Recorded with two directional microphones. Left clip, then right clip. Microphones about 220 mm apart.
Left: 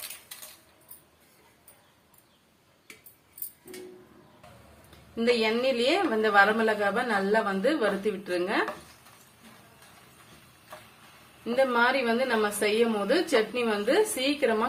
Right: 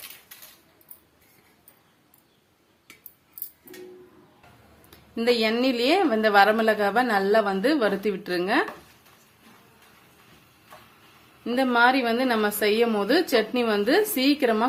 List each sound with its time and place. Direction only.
5.1 s a woman's voice: 50° right (ahead or behind)
11.4 s a woman's voice: 45° right (ahead or behind)